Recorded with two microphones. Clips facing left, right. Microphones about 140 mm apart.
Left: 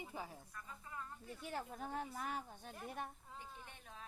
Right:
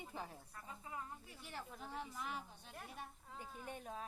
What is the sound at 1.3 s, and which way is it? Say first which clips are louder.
Speech: left 6 dB; 45° left (ahead or behind).